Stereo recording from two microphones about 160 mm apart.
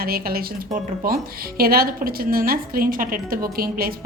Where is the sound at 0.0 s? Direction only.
70° right (ahead or behind).